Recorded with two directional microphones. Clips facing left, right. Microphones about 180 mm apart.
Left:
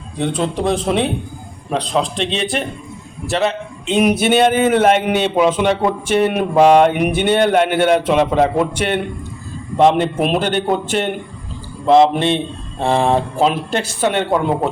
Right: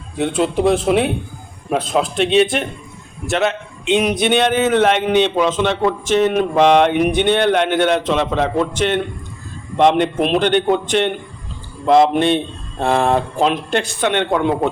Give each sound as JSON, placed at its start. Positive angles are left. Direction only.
{"t": 0.2, "sound": "a man's voice", "side_deg": 0}